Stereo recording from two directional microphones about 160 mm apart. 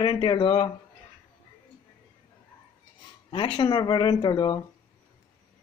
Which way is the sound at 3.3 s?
35° left (ahead or behind).